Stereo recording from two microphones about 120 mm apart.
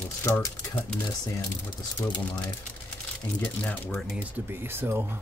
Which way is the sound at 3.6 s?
15° left (ahead or behind).